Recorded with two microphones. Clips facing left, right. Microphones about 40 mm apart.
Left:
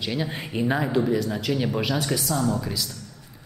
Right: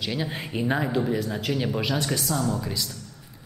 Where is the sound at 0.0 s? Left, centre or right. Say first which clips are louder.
Left 1 dB; centre.